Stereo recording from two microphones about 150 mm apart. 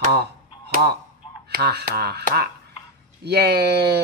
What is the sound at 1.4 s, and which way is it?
Speech, 90° right.